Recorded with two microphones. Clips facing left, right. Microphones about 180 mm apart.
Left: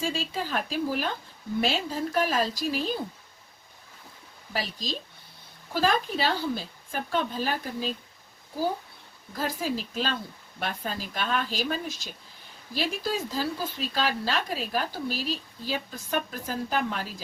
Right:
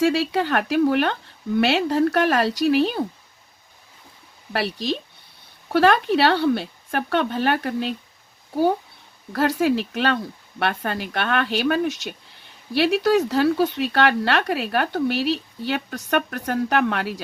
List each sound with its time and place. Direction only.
0.0 s speech: 70° right (ahead or behind)
4.5 s speech: 65° right (ahead or behind)
9.3 s speech: 70° right (ahead or behind)